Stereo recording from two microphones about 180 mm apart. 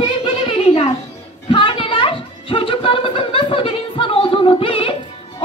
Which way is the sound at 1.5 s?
30° left (ahead or behind).